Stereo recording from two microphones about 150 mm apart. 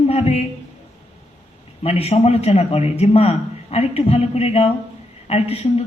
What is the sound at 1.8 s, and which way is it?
A man's voice, 45° left (ahead or behind).